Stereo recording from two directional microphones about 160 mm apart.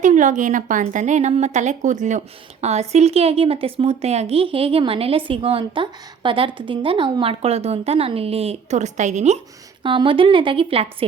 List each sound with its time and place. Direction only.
0.0 s a woman's voice: 50° right (ahead or behind)
9.8 s a woman's voice: 30° right (ahead or behind)